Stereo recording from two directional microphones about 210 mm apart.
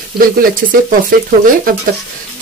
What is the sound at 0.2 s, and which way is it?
Speech, 45° right (ahead or behind).